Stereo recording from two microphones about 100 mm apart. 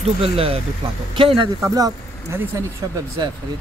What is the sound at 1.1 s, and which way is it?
Speech, 60° right (ahead or behind).